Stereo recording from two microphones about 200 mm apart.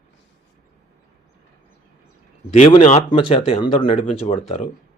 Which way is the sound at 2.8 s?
40° left (ahead or behind).